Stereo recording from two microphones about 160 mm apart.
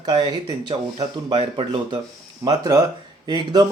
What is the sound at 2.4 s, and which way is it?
Speech, 20° right (ahead or behind).